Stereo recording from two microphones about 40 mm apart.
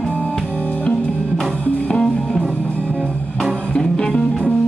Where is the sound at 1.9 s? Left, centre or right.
Centre.